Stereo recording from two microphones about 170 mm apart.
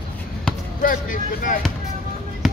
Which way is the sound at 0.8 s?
55° left (ahead or behind).